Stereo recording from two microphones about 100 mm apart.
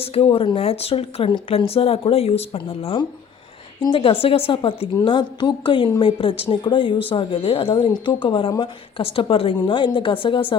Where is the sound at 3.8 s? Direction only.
60° left (ahead or behind).